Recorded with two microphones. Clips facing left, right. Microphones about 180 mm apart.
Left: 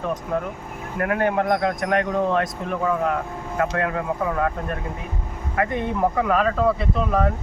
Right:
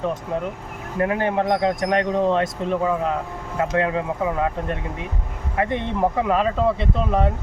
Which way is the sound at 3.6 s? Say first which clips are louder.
Right 2 dB; 20° right (ahead or behind).